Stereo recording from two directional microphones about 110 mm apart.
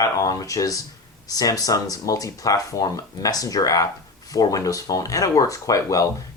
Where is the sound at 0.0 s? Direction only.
30° left (ahead or behind).